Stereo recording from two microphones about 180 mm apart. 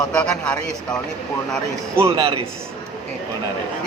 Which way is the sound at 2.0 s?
30° right (ahead or behind).